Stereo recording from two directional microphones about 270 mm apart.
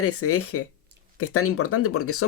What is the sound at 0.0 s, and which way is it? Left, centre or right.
Speech, left.